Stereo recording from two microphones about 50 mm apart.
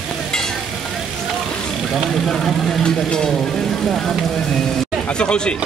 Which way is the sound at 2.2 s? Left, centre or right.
Centre.